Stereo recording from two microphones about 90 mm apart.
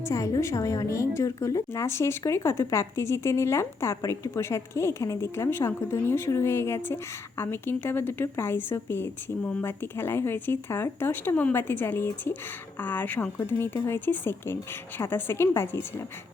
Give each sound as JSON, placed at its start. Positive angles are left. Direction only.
{"t": 0.0, "sound": "a woman's voice", "side_deg": 35}